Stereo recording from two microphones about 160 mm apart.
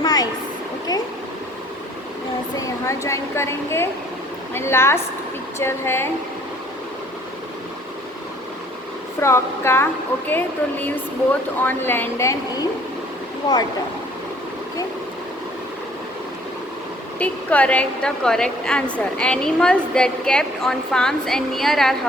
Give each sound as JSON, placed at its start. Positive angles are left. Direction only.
{"t": 0.0, "sound": "a sound", "side_deg": 25}
{"t": 2.6, "sound": "speech", "side_deg": 20}
{"t": 9.2, "sound": "speech", "side_deg": 15}
{"t": 17.2, "sound": "a woman's voice", "side_deg": 10}